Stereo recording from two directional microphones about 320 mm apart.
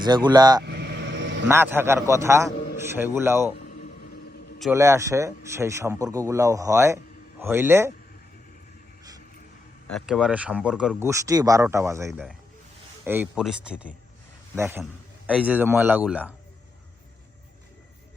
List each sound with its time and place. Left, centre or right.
0.0 s speech: centre
0.6 s vehicle: right
1.5 s speech: centre
4.6 s speech: centre
9.8 s speech: centre